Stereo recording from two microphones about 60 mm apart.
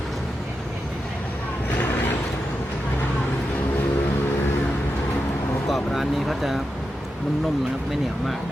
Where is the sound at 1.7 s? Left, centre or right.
Left.